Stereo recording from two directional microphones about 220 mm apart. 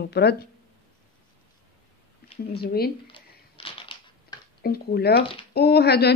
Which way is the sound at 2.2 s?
45° left (ahead or behind).